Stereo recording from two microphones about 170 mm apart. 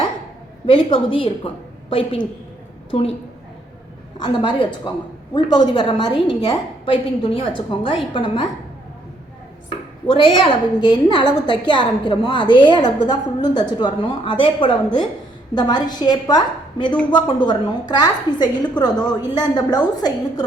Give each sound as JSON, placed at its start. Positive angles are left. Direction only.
{"t": 0.7, "sound": "a woman's voice", "side_deg": 30}
{"t": 4.2, "sound": "a woman's voice", "side_deg": 30}
{"t": 10.1, "sound": "a woman's voice", "side_deg": 30}